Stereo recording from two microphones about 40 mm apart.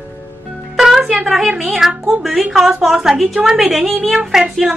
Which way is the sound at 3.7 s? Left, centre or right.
Centre.